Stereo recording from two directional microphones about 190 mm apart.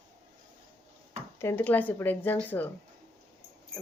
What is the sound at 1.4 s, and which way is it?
Speech, 10° left (ahead or behind).